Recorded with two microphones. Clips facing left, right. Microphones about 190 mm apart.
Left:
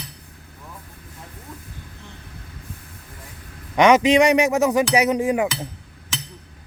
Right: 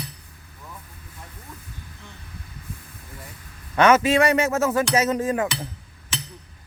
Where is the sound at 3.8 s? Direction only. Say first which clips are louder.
Left 3 dB; 15° left (ahead or behind).